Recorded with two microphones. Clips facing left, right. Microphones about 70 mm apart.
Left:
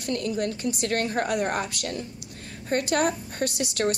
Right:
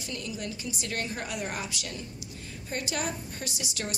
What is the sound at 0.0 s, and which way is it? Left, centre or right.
A woman's voice, left.